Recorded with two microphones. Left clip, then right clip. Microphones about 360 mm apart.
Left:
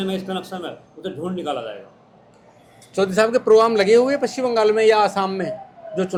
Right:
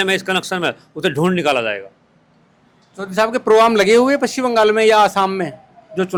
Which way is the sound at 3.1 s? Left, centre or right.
Centre.